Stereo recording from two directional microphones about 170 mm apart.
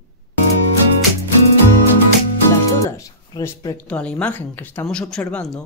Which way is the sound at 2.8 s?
20° left (ahead or behind).